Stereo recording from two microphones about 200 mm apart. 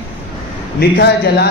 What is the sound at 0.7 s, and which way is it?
Speech, 55° left (ahead or behind).